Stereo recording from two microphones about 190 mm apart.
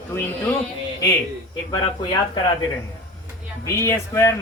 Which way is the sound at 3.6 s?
15° left (ahead or behind).